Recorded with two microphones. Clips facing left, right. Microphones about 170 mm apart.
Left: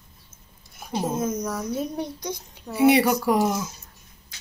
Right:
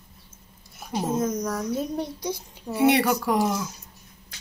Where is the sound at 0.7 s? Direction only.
Centre (ahead or behind).